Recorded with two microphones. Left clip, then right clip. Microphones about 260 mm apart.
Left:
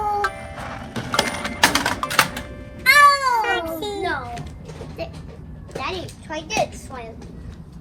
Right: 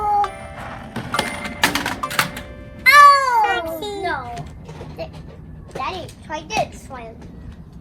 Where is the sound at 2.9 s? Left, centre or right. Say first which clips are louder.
Right 4 dB; right.